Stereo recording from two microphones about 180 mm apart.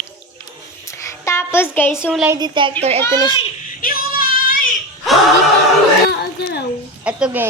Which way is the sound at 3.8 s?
55° left (ahead or behind).